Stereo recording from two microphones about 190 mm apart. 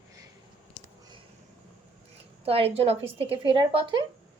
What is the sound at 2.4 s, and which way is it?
A woman's voice, 30° right (ahead or behind).